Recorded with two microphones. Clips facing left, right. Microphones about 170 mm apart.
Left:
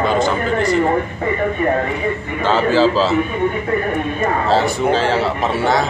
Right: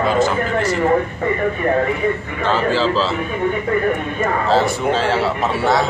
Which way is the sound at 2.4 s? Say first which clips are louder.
Left 3 dB; centre (ahead or behind).